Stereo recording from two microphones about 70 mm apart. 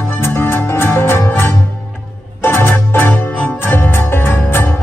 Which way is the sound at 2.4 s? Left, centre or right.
Left.